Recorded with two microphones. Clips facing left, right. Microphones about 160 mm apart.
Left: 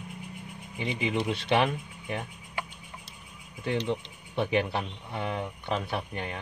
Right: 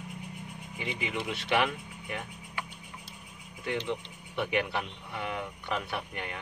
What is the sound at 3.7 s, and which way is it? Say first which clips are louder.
Speech: left 3 dB; 35° left (ahead or behind).